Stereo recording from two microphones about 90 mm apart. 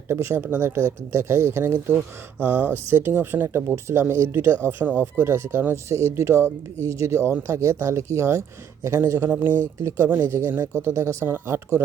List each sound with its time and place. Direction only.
0.1 s speech: 25° right (ahead or behind)